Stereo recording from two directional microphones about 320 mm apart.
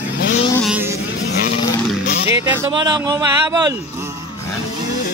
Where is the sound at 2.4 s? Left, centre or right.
Centre.